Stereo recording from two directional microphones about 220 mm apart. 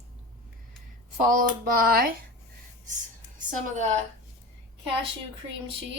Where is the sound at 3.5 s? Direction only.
30° right (ahead or behind).